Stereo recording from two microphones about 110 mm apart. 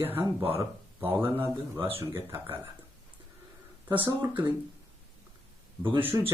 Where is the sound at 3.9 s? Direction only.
25° right (ahead or behind).